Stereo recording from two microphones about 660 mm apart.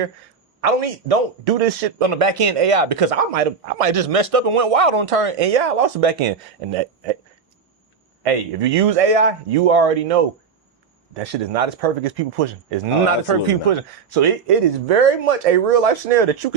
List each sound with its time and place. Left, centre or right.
0.6 s a man's voice: right
8.2 s a man's voice: right